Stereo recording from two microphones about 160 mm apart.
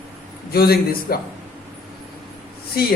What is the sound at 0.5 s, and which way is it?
Speech, 70° left (ahead or behind).